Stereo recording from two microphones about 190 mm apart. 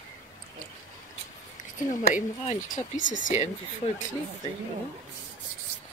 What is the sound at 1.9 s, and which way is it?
Speech, 45° left (ahead or behind).